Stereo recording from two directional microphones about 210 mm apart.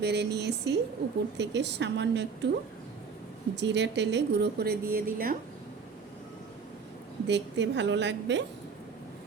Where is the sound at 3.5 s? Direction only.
55° right (ahead or behind).